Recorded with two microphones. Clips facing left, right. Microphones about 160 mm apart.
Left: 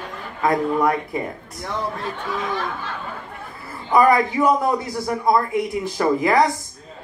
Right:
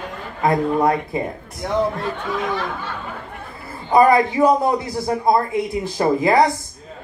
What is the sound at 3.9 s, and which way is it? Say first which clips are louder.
Speech: right 2 dB; 25° right (ahead or behind).